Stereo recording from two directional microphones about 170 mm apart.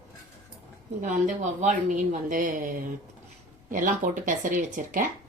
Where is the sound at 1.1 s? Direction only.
45° right (ahead or behind).